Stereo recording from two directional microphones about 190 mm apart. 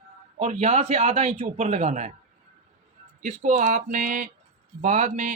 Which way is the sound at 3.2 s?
40° right (ahead or behind).